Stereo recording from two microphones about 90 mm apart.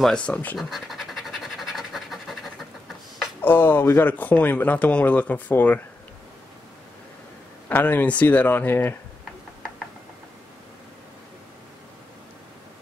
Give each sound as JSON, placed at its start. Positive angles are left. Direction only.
{"t": 0.0, "sound": "speech", "side_deg": 10}
{"t": 0.6, "sound": "scratch", "side_deg": 0}
{"t": 3.4, "sound": "speech", "side_deg": 20}
{"t": 7.6, "sound": "speech", "side_deg": 20}